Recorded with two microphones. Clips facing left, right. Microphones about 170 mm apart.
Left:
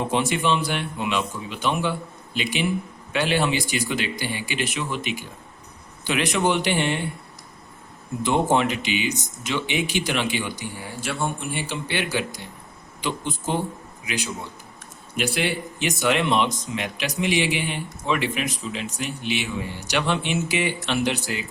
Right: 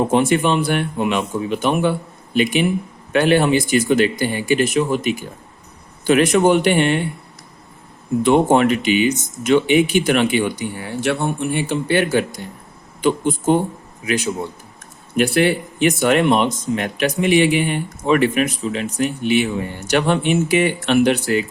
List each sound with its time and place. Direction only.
0.0 s speech: 50° right (ahead or behind)
8.2 s speech: 60° right (ahead or behind)